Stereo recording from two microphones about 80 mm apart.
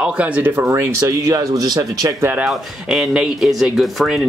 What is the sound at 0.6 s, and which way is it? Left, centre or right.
Speech, right.